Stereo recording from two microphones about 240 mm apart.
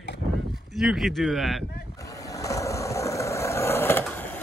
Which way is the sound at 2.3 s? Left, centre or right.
Centre.